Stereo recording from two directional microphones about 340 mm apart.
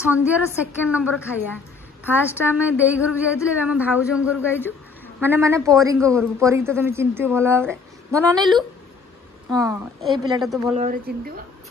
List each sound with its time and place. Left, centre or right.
0.1 s a woman's voice: centre
4.6 s a sound: centre
5.2 s a man's voice: centre
9.6 s a woman's voice: centre
10.8 s speech: right